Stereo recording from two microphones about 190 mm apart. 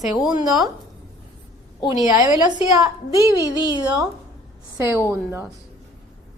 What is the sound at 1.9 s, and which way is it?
Speech, 20° right (ahead or behind).